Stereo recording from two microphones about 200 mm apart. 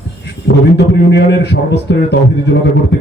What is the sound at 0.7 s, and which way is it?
A man's voice, 55° left (ahead or behind).